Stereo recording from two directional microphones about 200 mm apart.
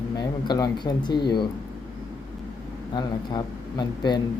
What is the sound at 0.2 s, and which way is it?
Speech, 20° left (ahead or behind).